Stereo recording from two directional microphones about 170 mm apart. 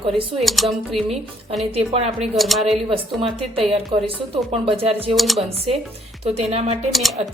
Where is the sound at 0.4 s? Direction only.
Centre (ahead or behind).